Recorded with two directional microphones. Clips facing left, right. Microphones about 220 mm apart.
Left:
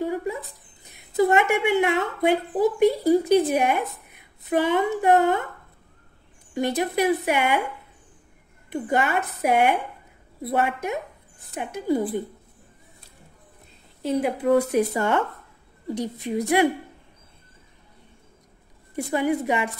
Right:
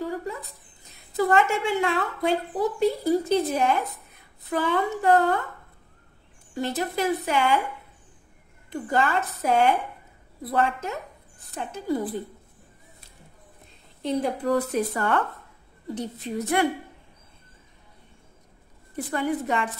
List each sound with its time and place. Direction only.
0.0 s a sound: 20° left (ahead or behind)
0.9 s a woman's voice: 20° left (ahead or behind)
6.5 s a woman's voice: 15° left (ahead or behind)
8.7 s a woman's voice: 20° left (ahead or behind)
14.0 s a woman's voice: 10° left (ahead or behind)
18.9 s a woman's voice: 10° left (ahead or behind)